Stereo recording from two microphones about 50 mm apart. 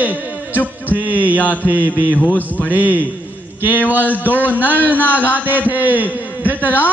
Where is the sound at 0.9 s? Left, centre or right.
Right.